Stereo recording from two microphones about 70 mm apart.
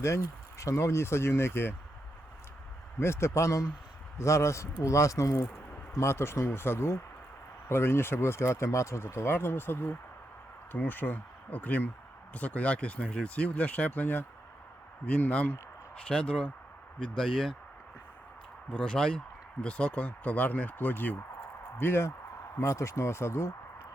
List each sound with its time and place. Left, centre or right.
0.6 s speech: left
3.0 s speech: left
6.0 s speech: left; by 17.6 s centre
18.7 s speech: centre; by 22.1 s left
22.6 s speech: left